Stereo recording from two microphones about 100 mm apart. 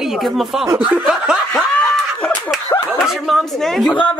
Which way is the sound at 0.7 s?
20° right (ahead or behind).